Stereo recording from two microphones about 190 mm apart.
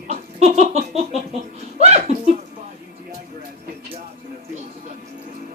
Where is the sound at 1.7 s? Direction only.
35° right (ahead or behind).